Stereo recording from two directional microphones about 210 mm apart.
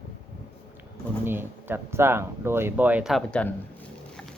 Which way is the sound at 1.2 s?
10° right (ahead or behind).